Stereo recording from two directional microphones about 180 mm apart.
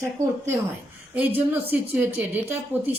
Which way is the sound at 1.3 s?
30° right (ahead or behind).